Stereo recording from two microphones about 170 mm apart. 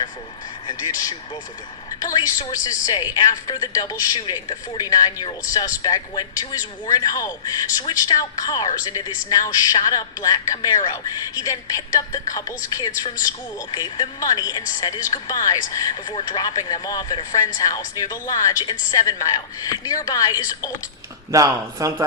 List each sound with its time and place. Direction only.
0.7 s speech: 20° left (ahead or behind)
21.3 s speech: 20° right (ahead or behind)